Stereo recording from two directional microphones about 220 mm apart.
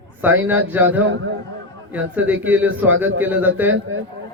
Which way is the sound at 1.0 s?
60° right (ahead or behind).